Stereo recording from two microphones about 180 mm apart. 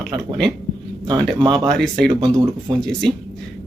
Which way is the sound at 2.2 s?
20° right (ahead or behind).